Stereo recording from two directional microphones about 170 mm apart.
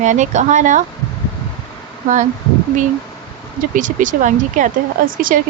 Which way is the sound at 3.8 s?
50° right (ahead or behind).